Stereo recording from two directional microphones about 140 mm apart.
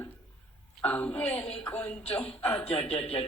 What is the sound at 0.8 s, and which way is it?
A man's voice, 10° left (ahead or behind).